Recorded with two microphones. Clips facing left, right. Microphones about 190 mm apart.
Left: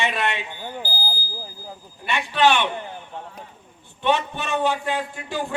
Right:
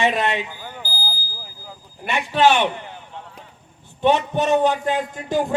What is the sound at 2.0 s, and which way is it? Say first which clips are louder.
Speech: right 2 dB; 40° right (ahead or behind).